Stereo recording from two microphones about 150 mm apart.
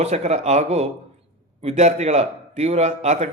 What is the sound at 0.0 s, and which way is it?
A man's voice, 50° right (ahead or behind).